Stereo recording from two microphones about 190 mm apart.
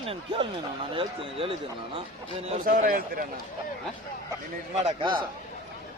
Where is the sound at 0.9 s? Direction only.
30° right (ahead or behind).